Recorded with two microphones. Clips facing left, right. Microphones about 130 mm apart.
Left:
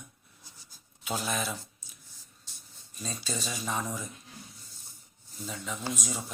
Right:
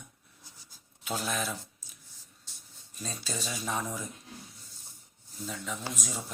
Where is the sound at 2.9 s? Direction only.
Centre (ahead or behind).